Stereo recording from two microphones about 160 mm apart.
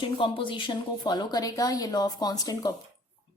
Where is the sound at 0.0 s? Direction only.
30° left (ahead or behind).